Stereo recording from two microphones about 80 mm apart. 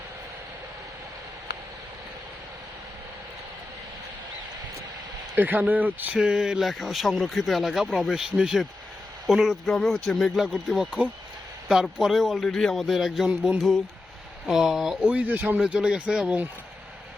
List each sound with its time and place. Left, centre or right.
5.3 s speech: right
6.1 s speech: centre
15.1 s speech: centre